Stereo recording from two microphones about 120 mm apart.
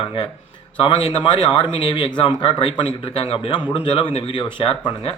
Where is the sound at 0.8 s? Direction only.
45° left (ahead or behind).